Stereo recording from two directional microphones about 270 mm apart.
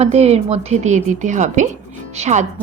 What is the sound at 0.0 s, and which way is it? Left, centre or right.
Speech, right.